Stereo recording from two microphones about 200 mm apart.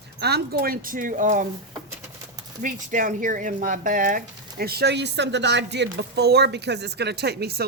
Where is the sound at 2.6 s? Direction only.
40° right (ahead or behind).